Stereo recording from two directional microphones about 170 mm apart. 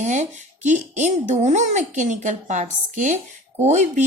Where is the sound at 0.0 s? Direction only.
45° right (ahead or behind).